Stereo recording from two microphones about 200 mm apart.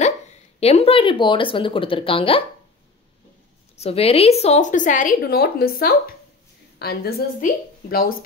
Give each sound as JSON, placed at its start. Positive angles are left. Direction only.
{"t": 0.6, "sound": "speech", "side_deg": 30}
{"t": 3.7, "sound": "a woman's voice", "side_deg": 30}